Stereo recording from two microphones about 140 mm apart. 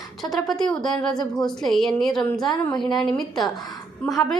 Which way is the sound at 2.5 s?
30° left (ahead or behind).